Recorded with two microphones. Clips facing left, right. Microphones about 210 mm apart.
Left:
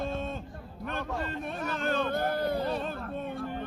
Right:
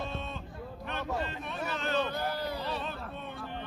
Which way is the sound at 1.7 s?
50° left (ahead or behind).